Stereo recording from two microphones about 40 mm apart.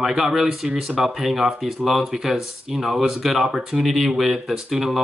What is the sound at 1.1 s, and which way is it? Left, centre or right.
Speech, centre.